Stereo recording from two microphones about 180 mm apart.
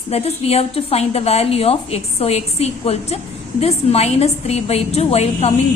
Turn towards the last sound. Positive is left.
turn(degrees=35)  # may be behind; listen again after turning